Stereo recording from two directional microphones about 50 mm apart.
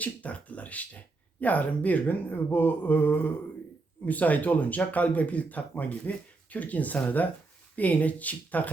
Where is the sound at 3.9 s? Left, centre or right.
Left.